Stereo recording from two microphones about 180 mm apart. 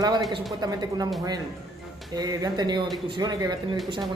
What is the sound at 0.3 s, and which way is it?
Speech, 20° right (ahead or behind).